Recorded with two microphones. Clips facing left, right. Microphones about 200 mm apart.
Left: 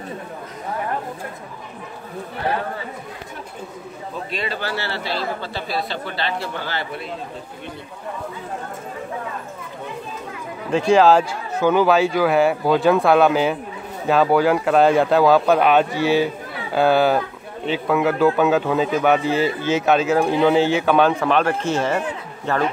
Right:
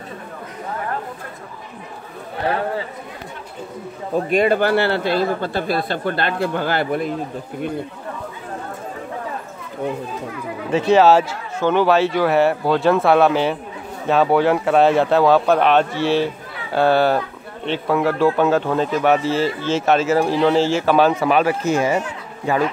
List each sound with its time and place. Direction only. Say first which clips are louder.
4.1 s speech: right 12 dB; 50° right (ahead or behind)
10.7 s speech: right 1 dB; 5° right (ahead or behind)